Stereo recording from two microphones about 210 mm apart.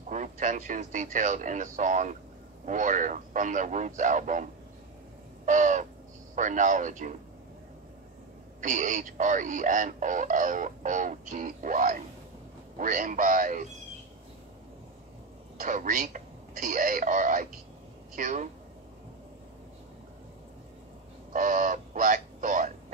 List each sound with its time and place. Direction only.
0.1 s speech: 35° right (ahead or behind)
5.4 s owl: 35° right (ahead or behind)
6.3 s speech: 35° right (ahead or behind)
8.5 s speech: 35° right (ahead or behind)
15.5 s speech: 40° right (ahead or behind)
21.3 s speech: 40° right (ahead or behind)